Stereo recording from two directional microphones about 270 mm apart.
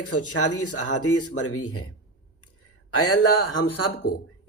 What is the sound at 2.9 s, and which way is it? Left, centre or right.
Speech, left.